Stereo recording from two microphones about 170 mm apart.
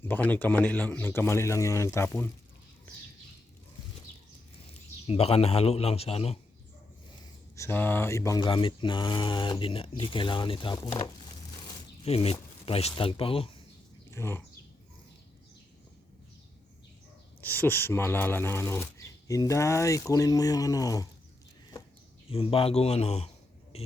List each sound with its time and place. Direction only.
0.0 s speech: 10° left (ahead or behind)
4.7 s a man's voice: 35° left (ahead or behind)
7.5 s speech: 15° left (ahead or behind)
8.4 s speech: 30° left (ahead or behind)
14.1 s speech: 15° left (ahead or behind)
17.4 s speech: 10° left (ahead or behind)
22.3 s speech: 35° left (ahead or behind)